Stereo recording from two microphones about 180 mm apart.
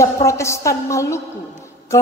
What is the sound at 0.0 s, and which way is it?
A man's voice, 15° left (ahead or behind).